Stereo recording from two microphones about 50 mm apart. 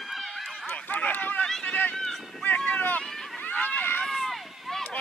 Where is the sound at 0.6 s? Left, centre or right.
Left.